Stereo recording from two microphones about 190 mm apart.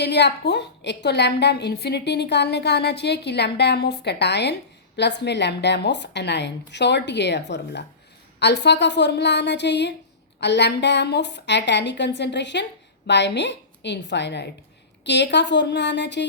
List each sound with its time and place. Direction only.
0.0 s a woman's voice: 60° left (ahead or behind)